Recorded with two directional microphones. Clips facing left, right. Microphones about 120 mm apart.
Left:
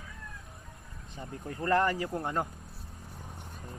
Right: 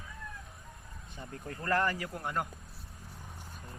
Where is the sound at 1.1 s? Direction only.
25° left (ahead or behind).